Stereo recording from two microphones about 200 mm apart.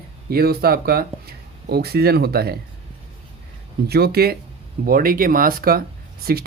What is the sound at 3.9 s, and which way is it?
Speech, 50° right (ahead or behind).